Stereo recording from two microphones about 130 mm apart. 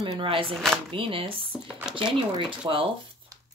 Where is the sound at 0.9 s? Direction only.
45° right (ahead or behind).